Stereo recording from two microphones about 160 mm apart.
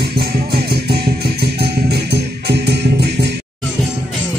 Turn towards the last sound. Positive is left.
turn(degrees=-90)